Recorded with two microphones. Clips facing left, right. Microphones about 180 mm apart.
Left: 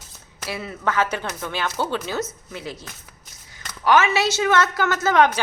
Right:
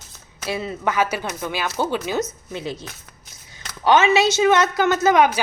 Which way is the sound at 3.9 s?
20° right (ahead or behind).